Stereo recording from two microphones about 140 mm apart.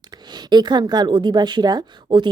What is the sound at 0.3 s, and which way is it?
A woman's voice, 30° right (ahead or behind).